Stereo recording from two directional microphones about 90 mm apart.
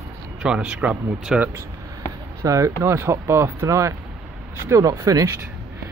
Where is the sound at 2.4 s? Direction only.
40° right (ahead or behind).